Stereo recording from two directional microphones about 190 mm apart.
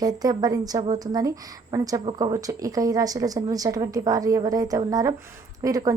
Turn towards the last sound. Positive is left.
turn(degrees=-20)  # may be behind; listen again after turning